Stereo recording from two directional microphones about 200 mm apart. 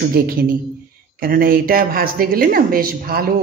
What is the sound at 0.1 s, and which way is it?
Speech, 45° right (ahead or behind).